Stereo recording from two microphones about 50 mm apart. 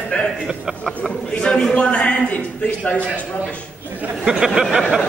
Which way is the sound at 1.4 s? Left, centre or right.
Centre.